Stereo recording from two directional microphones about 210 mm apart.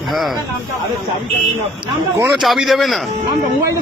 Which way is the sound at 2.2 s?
Centre (ahead or behind).